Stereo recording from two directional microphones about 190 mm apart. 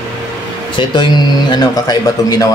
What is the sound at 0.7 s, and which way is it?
Speech, 25° left (ahead or behind).